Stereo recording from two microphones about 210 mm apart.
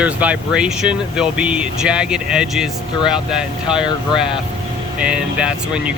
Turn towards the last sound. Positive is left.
turn(degrees=-5)  # may be behind; listen again after turning